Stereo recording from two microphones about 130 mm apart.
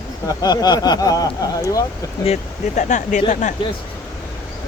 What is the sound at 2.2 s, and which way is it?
Speech, 60° left (ahead or behind).